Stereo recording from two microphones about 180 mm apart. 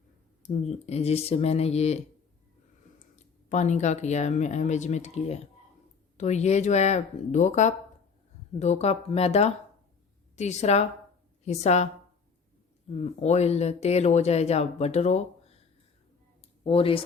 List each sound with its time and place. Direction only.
0.4 s speech: 35° left (ahead or behind)
3.2 s speech: 40° left (ahead or behind)
12.9 s speech: 35° left (ahead or behind)
16.6 s speech: 30° left (ahead or behind)